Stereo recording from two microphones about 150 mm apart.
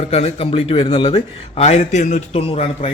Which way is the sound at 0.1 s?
45° left (ahead or behind).